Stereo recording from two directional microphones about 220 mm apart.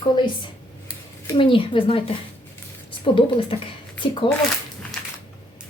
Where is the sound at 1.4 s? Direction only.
25° left (ahead or behind).